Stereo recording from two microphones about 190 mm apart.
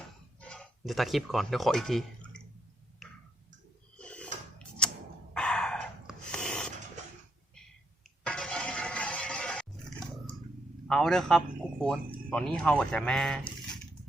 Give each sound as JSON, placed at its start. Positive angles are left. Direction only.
{"t": 0.3, "sound": "speech", "side_deg": 5}
{"t": 3.0, "sound": "tick", "side_deg": 0}
{"t": 3.9, "sound": "a sound", "side_deg": 5}
{"t": 5.3, "sound": "dog", "side_deg": 5}
{"t": 8.2, "sound": "a sound", "side_deg": 5}
{"t": 10.8, "sound": "speech", "side_deg": 0}